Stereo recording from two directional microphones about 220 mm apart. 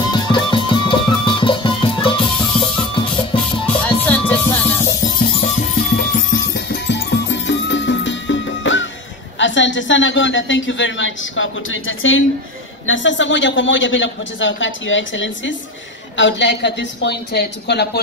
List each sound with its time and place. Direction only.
0.0 s music: 20° left (ahead or behind)
3.6 s music: 5° left (ahead or behind)
5.9 s music: 40° left (ahead or behind)
9.4 s a woman's voice: 55° left (ahead or behind)